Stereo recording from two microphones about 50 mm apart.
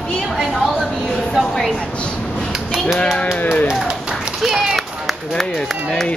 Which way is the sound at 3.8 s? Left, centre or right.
Centre.